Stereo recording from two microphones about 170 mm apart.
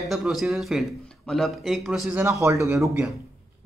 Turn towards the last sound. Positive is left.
turn(degrees=-15)  # may be behind; listen again after turning